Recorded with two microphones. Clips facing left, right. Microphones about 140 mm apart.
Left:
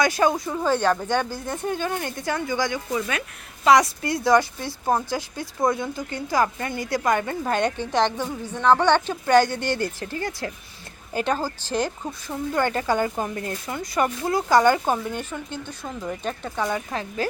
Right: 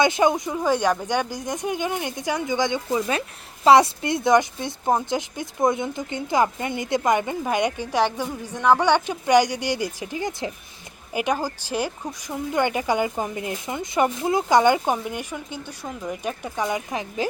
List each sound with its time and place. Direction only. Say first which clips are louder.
0.0 s speech: right 2 dB; 20° right (ahead or behind)